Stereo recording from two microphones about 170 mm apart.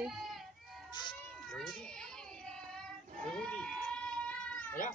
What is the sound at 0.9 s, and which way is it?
Cat, 25° left (ahead or behind).